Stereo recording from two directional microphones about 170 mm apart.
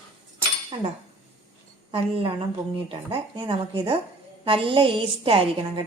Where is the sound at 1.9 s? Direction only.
30° right (ahead or behind).